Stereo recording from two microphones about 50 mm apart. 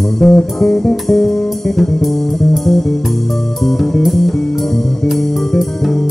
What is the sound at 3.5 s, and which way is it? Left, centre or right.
Music, centre.